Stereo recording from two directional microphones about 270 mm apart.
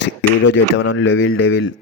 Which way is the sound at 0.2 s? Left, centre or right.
Left.